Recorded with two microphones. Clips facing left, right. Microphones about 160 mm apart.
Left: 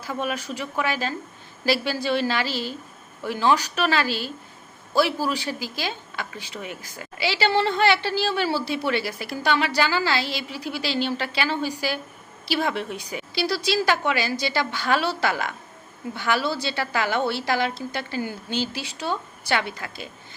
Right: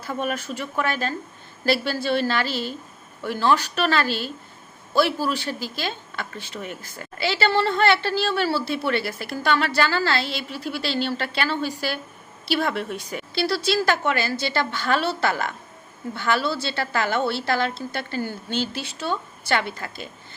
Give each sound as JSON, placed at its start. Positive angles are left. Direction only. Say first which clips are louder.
{"t": 0.0, "sound": "a woman's voice", "louder": "right 1 dB", "side_deg": 10}
{"t": 2.5, "sound": "a woman's voice", "louder": "right 1 dB", "side_deg": -50}
{"t": 3.2, "sound": "a woman's voice", "louder": "even", "side_deg": 15}
{"t": 5.5, "sound": "a woman's voice", "louder": "right 1 dB", "side_deg": 10}
{"t": 10.3, "sound": "a woman's voice", "louder": "right 1 dB", "side_deg": -50}
{"t": 10.7, "sound": "a woman's voice", "louder": "even", "side_deg": 15}
{"t": 13.0, "sound": "a woman's voice", "louder": "right 1 dB", "side_deg": -50}
{"t": 13.3, "sound": "a woman's voice", "louder": "right 1 dB", "side_deg": 15}
{"t": 18.5, "sound": "a woman's voice", "louder": "right 1 dB", "side_deg": -50}
{"t": 18.8, "sound": "a woman's voice", "louder": "right 1 dB", "side_deg": 15}